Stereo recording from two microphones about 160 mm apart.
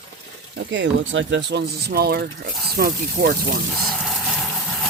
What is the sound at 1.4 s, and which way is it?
Speech, 90° right.